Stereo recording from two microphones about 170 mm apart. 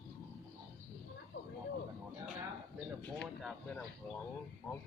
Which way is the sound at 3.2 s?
Centre (ahead or behind).